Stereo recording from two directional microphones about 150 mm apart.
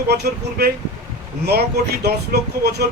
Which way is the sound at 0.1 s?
90° right.